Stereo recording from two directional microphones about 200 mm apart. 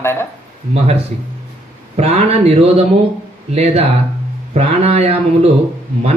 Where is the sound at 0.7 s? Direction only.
30° right (ahead or behind).